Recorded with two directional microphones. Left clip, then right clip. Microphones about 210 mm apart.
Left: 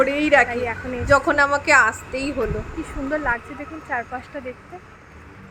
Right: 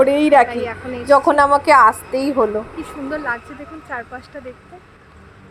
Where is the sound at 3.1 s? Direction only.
Centre (ahead or behind).